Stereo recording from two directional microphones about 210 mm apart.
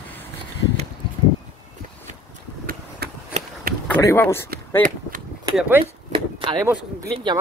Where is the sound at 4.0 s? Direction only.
15° left (ahead or behind).